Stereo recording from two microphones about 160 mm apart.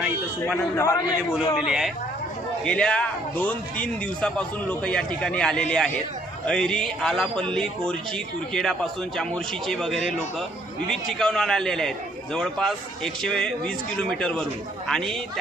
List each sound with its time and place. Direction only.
0.0 s a man's voice: centre (ahead or behind)
0.8 s a man's voice: 20° left (ahead or behind)
1.5 s a man's voice: 5° right (ahead or behind)